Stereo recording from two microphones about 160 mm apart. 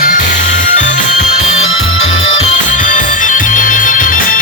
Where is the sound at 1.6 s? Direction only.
40° left (ahead or behind).